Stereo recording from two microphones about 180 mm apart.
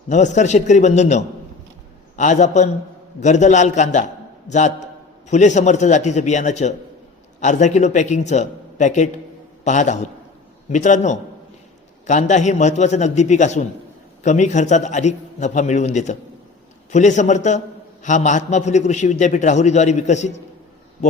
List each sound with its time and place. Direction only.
0.1 s a man's voice: 40° left (ahead or behind)